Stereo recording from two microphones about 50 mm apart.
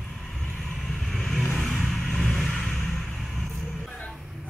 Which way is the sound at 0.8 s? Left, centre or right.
Centre.